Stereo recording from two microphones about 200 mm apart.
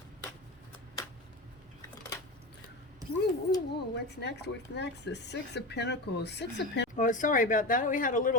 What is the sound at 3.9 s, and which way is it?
Speech, 55° left (ahead or behind).